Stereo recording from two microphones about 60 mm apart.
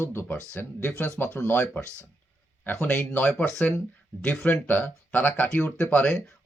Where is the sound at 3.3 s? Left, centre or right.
Centre.